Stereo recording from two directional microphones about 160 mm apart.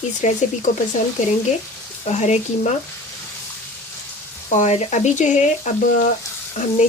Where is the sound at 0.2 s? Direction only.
50° left (ahead or behind).